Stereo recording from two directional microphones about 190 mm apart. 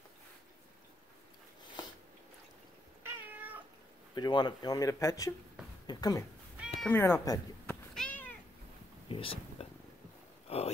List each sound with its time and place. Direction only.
3.0 s cat: 10° right (ahead or behind)
4.1 s speech: 20° left (ahead or behind)
6.8 s cat: 10° left (ahead or behind)
9.1 s a sound: 30° left (ahead or behind)